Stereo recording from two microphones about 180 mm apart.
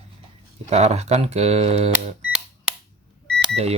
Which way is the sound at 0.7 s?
35° right (ahead or behind).